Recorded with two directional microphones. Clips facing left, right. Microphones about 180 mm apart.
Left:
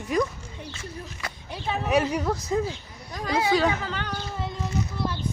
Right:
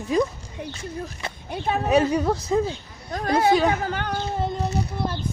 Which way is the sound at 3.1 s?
55° right (ahead or behind).